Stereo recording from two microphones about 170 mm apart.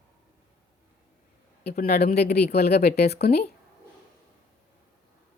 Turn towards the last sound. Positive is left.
turn(degrees=70)  # may be behind; listen again after turning